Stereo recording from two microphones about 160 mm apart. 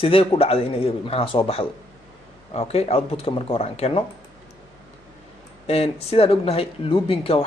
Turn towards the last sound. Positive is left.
turn(degrees=35)  # may be behind; listen again after turning